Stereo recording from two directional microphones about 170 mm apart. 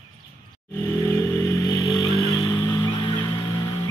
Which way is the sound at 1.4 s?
20° left (ahead or behind).